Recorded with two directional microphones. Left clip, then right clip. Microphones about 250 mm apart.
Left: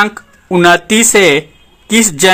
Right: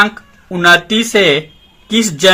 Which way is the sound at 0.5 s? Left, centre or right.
Left.